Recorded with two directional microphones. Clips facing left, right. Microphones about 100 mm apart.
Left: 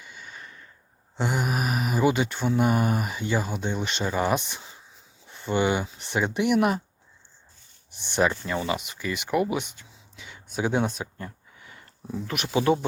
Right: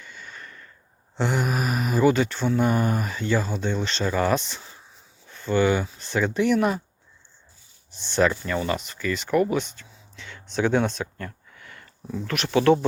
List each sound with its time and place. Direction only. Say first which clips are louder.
0.0 s a sound: right 1 dB; 10° left (ahead or behind)
2.6 s speech: even; 10° left (ahead or behind)
7.9 s speech: right 2 dB; 15° left (ahead or behind)